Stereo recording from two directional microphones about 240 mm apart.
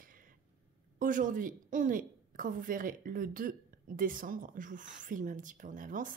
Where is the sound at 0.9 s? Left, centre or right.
Right.